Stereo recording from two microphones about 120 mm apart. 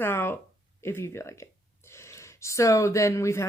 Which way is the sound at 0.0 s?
20° left (ahead or behind).